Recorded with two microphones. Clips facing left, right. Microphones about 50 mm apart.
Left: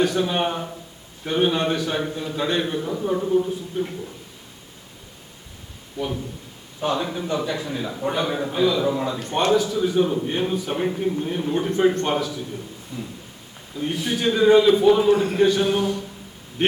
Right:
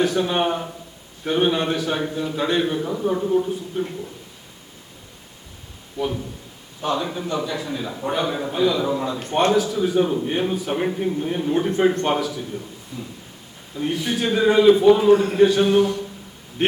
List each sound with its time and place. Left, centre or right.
0.0 s a man's voice: centre
6.8 s a man's voice: centre
7.3 s a man's voice: left
7.9 s a man's voice: centre
9.3 s a man's voice: centre
12.9 s a man's voice: centre
13.7 s a man's voice: centre